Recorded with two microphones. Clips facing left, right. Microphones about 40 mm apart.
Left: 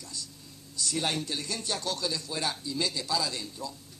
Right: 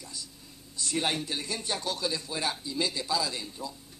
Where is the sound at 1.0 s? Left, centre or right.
Centre.